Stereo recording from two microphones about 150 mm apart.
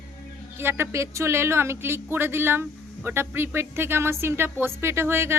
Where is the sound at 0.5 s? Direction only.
15° right (ahead or behind).